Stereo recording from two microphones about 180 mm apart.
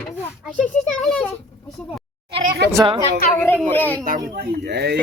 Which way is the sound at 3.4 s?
10° left (ahead or behind).